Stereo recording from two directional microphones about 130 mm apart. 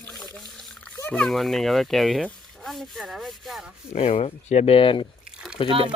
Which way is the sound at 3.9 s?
55° left (ahead or behind).